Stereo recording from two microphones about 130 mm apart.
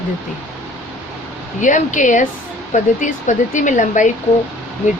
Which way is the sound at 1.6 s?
75° left (ahead or behind).